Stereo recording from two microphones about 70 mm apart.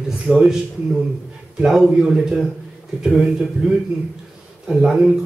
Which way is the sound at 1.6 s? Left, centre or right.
Centre.